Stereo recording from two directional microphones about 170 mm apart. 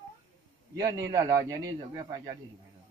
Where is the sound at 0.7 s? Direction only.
20° right (ahead or behind).